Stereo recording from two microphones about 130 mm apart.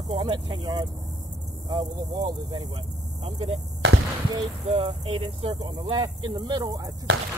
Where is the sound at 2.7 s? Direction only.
45° right (ahead or behind).